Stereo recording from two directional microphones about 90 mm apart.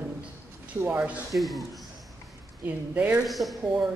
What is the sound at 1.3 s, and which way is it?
Speech, centre (ahead or behind).